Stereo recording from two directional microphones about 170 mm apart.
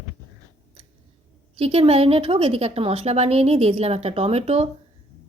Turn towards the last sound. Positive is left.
turn(degrees=-40)  # may be behind; listen again after turning